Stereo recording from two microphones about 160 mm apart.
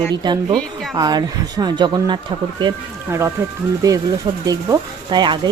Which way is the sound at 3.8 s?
20° right (ahead or behind).